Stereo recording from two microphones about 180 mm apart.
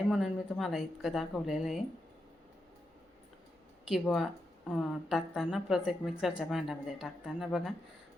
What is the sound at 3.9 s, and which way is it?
Speech, centre (ahead or behind).